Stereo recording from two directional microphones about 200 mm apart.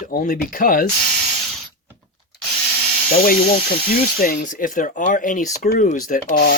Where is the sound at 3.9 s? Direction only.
45° left (ahead or behind).